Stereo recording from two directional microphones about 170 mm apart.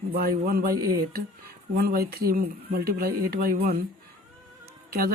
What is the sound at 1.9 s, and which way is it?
Speech, 65° right (ahead or behind).